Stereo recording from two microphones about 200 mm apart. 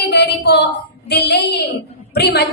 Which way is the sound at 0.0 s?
55° left (ahead or behind).